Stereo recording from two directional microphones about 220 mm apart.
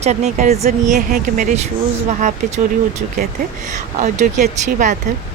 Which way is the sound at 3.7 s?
35° right (ahead or behind).